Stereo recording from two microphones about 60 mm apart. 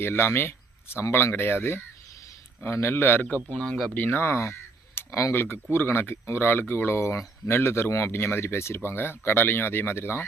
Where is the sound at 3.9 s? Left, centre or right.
Left.